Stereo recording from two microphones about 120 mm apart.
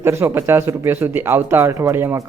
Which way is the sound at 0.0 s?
20° right (ahead or behind).